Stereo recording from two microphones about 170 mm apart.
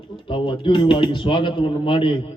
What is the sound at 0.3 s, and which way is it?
A man's voice, 30° left (ahead or behind).